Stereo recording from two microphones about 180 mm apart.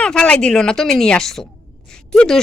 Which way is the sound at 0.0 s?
5° left (ahead or behind).